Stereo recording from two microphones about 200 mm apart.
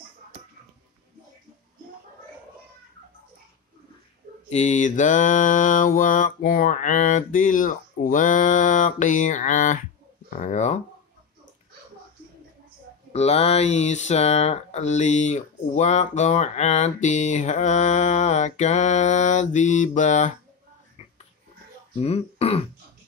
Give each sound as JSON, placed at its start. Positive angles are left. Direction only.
{"t": 4.5, "sound": "speech", "side_deg": 35}
{"t": 13.1, "sound": "speech", "side_deg": 30}
{"t": 21.9, "sound": "speech", "side_deg": 30}